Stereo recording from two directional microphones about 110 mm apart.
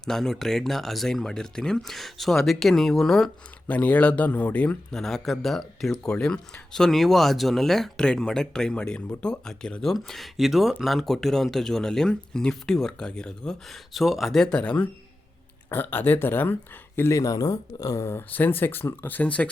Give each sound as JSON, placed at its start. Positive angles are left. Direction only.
{"t": 0.0, "sound": "speech", "side_deg": 5}